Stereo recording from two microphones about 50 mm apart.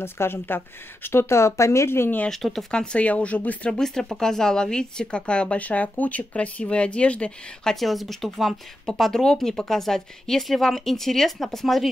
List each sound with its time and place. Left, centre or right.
0.0 s speech: left
1.0 s speech: left
2.2 s speech: centre
2.7 s speech: centre
3.7 s speech: centre
7.6 s speech: centre